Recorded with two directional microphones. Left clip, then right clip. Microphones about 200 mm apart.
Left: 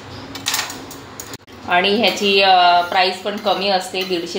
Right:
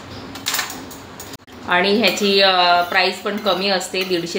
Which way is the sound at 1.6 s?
15° right (ahead or behind).